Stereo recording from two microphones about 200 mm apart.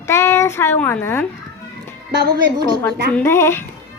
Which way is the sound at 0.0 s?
10° left (ahead or behind).